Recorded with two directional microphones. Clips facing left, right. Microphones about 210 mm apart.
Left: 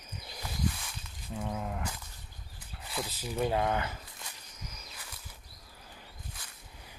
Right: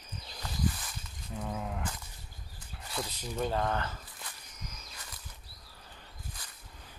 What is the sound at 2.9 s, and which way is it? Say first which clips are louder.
Speech: left 1 dB; 5° left (ahead or behind).